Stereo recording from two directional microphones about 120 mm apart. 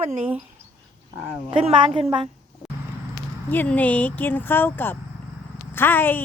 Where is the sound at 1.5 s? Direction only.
50° right (ahead or behind).